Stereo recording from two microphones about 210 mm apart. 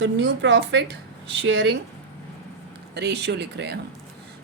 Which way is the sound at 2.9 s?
55° right (ahead or behind).